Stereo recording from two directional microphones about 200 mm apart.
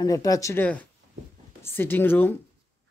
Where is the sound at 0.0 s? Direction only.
15° left (ahead or behind).